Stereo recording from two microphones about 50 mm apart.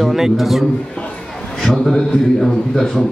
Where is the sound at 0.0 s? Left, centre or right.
Centre.